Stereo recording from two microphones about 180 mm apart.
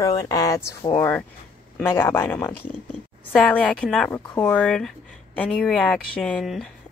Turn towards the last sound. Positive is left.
turn(degrees=0)  # may be behind; listen again after turning